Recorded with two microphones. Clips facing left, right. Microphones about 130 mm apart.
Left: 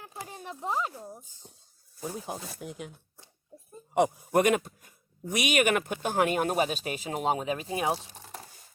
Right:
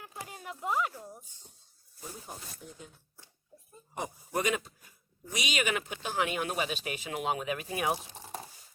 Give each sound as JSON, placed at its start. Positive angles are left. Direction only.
{"t": 0.2, "sound": "speech", "side_deg": 30}
{"t": 2.0, "sound": "speech", "side_deg": 80}
{"t": 3.9, "sound": "a man's voice", "side_deg": 70}
{"t": 7.9, "sound": "a sound", "side_deg": -15}